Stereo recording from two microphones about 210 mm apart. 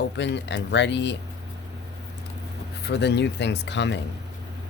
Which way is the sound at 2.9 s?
55° left (ahead or behind).